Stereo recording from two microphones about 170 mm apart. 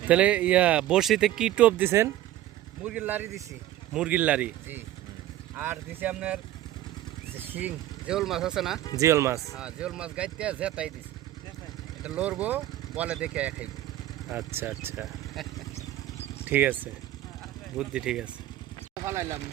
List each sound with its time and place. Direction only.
0.1 s speech: 5° right (ahead or behind)
7.5 s speech: 5° right (ahead or behind)
9.0 s speech: 15° right (ahead or behind)
9.6 s speech: 5° right (ahead or behind)
12.0 s speech: 5° right (ahead or behind)
16.5 s speech: 10° right (ahead or behind)
17.7 s speech: 5° right (ahead or behind)